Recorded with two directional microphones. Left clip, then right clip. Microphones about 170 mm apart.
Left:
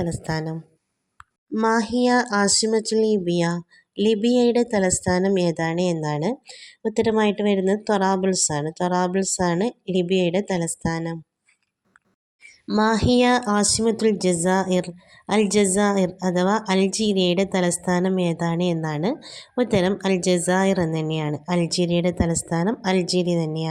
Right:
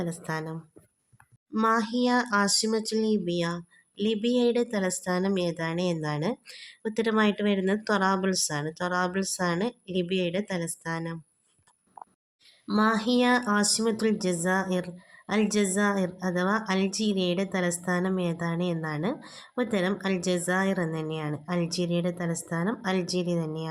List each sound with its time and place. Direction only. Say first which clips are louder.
0.0 s speech: left 6 dB; 25° left (ahead or behind)
1.5 s speech: left 4 dB; 25° left (ahead or behind)
12.4 s a sound: left 5 dB; 25° left (ahead or behind)
12.9 s speech: left 6 dB; 30° left (ahead or behind)